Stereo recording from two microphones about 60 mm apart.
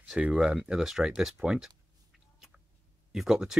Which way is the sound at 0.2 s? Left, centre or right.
Centre.